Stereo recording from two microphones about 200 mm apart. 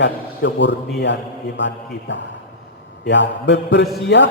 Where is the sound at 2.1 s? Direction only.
65° left (ahead or behind).